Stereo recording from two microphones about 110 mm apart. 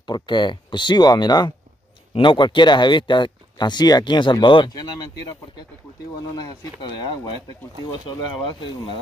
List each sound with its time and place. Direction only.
0.0 s speech: 40° left (ahead or behind)
6.3 s speech: 40° left (ahead or behind)